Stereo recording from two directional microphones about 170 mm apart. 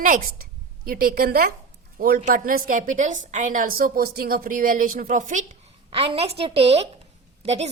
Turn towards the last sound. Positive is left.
turn(degrees=-40)  # may be behind; listen again after turning